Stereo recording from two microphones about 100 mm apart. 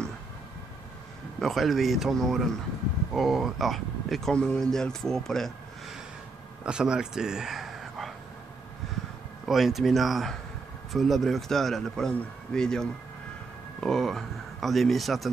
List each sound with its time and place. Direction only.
1.4 s speech: centre (ahead or behind)
6.6 s speech: 10° right (ahead or behind)
9.5 s speech: 5° right (ahead or behind)
13.7 s a sound: 5° left (ahead or behind)